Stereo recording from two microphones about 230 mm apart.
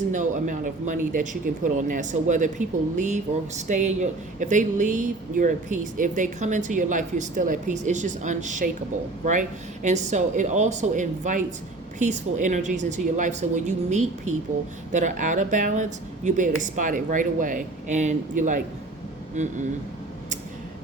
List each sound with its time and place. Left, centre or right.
0.1 s speech: right